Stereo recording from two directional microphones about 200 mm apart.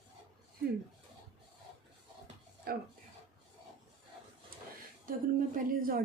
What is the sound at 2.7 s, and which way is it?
Speech, 50° right (ahead or behind).